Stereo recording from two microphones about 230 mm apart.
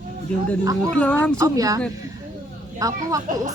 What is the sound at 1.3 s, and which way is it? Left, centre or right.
Speech, centre.